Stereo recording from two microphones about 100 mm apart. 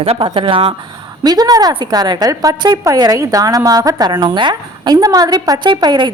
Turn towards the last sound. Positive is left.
turn(degrees=-45)  # may be behind; listen again after turning